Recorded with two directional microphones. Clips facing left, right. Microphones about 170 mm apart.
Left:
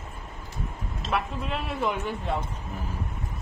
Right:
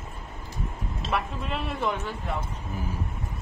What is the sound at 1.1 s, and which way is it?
Speech, centre (ahead or behind).